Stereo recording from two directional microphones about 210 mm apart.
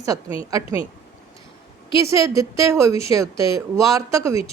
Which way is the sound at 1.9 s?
15° right (ahead or behind).